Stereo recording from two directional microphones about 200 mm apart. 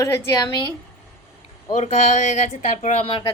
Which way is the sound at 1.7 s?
35° left (ahead or behind).